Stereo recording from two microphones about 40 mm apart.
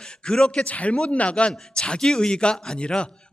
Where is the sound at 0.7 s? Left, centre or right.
Left.